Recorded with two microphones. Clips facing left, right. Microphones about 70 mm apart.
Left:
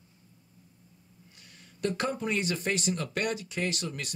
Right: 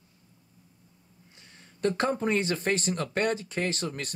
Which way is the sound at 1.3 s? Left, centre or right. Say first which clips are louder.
Right 2 dB; right.